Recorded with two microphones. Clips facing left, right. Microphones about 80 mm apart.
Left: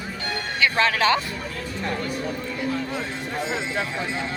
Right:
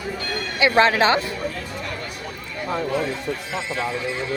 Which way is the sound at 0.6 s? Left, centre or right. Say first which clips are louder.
Right 4 dB; right.